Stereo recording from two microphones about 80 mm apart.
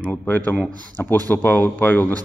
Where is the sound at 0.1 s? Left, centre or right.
Left.